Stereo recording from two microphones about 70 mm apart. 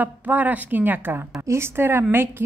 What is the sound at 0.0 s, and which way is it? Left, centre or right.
A woman's voice, right.